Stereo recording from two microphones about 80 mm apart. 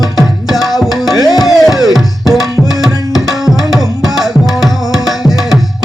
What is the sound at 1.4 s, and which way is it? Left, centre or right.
Music, centre.